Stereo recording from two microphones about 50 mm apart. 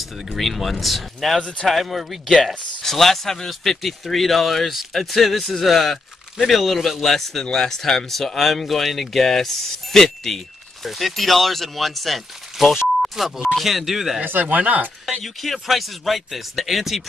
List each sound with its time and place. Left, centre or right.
0.4 s speech: centre
14.2 s speech: right
15.2 s speech: centre